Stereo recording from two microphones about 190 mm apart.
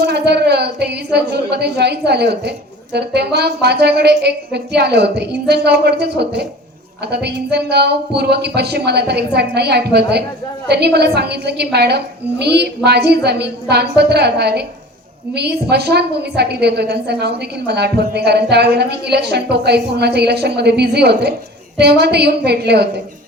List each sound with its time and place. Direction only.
0.0 s a woman's voice: 60° right (ahead or behind)